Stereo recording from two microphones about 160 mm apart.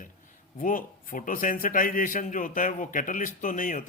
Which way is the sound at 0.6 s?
60° left (ahead or behind).